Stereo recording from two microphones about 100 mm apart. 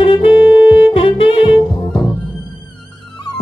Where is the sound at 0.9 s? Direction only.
65° left (ahead or behind).